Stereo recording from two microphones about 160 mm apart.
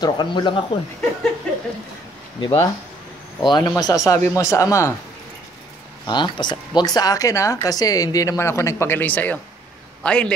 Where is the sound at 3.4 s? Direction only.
25° left (ahead or behind).